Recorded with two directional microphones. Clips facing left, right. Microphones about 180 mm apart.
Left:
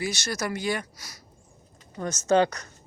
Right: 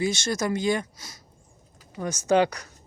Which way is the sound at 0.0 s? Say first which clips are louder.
Right 4 dB; 25° right (ahead or behind).